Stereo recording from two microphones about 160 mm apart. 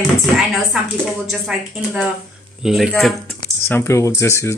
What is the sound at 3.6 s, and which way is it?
Speech, 15° left (ahead or behind).